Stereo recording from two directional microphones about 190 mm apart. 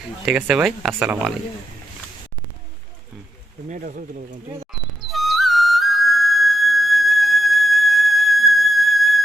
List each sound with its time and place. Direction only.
0.3 s speech: 5° right (ahead or behind)
3.7 s speech: 45° right (ahead or behind)
4.9 s flute: centre (ahead or behind)